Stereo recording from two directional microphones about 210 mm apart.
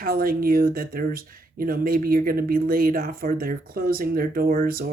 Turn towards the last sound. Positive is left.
turn(degrees=-45)  # may be behind; listen again after turning